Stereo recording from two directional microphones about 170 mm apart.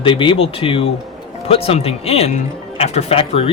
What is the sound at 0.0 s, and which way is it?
Speech, 30° left (ahead or behind).